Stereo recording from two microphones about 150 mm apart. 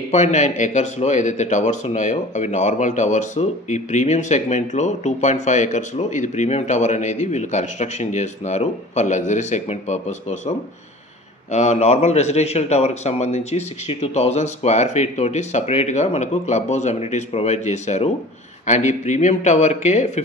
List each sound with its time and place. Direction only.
0.1 s speech: 50° left (ahead or behind)
11.5 s speech: 50° left (ahead or behind)